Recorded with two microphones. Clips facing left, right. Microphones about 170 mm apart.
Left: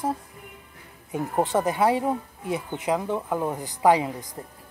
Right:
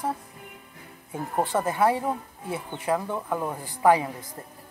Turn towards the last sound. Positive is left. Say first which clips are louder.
# left 1 dB
turn(degrees=15)  # may be behind; listen again after turning